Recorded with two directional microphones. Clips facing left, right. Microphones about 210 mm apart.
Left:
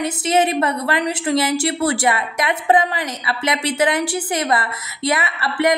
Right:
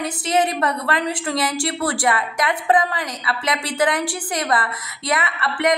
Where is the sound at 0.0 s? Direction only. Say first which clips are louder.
Left 3 dB; 25° left (ahead or behind).